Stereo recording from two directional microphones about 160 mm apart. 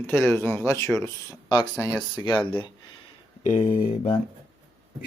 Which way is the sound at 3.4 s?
50° left (ahead or behind).